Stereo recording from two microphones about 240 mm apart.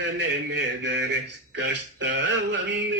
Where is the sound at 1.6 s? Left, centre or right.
Right.